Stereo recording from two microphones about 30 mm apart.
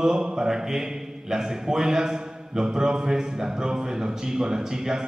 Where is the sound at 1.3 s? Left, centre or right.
Centre.